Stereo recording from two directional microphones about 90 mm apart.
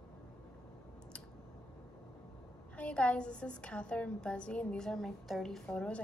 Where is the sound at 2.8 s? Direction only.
15° left (ahead or behind).